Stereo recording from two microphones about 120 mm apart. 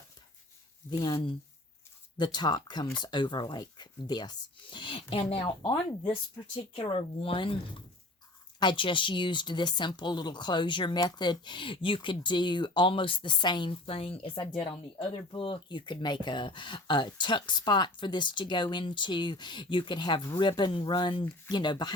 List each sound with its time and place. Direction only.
1.0 s speech: 50° left (ahead or behind)
2.1 s speech: 35° left (ahead or behind)